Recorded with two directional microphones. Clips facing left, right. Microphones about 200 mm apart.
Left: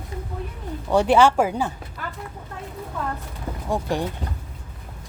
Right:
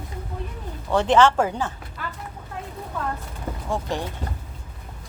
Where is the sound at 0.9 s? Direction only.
10° left (ahead or behind).